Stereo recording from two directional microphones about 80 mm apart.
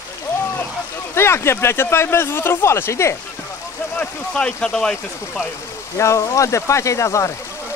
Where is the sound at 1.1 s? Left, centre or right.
Left.